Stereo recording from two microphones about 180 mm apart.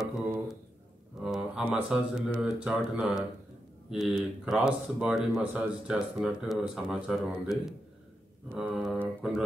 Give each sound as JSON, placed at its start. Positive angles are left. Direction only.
{"t": 0.0, "sound": "a sound", "side_deg": -5}
{"t": 1.2, "sound": "speech", "side_deg": -5}
{"t": 8.5, "sound": "mantra", "side_deg": 0}